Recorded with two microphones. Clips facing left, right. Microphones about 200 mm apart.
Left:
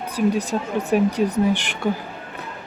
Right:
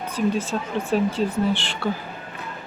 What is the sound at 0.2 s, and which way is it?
Speech, 10° left (ahead or behind).